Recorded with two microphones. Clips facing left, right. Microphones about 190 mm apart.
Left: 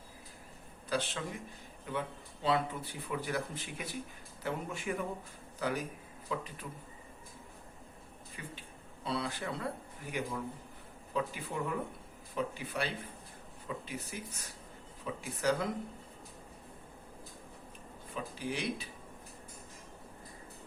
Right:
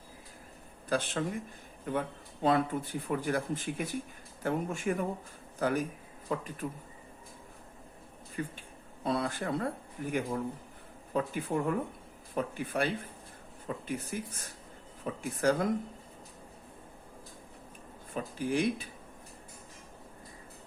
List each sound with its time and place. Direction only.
0.9 s speech: 50° right (ahead or behind)
8.4 s speech: 45° right (ahead or behind)
18.1 s speech: 50° right (ahead or behind)